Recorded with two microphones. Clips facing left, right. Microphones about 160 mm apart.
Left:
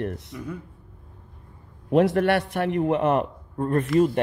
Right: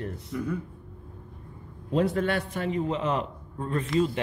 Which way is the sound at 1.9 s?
70° left (ahead or behind).